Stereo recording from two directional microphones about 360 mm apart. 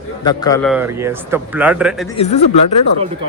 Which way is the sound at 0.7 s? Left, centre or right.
Centre.